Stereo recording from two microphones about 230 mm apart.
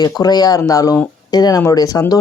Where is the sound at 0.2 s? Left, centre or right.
Centre.